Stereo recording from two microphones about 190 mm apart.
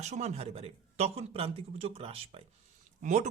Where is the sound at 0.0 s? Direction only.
35° right (ahead or behind).